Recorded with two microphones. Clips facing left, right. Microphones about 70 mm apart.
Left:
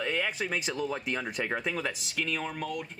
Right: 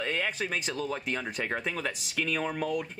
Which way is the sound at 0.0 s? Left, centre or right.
Centre.